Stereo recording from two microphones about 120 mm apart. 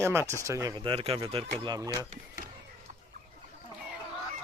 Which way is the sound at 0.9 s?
50° right (ahead or behind).